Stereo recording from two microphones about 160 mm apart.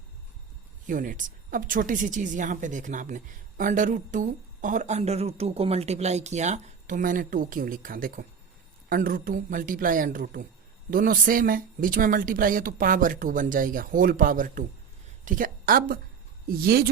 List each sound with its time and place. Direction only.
0.9 s a woman's voice: 55° right (ahead or behind)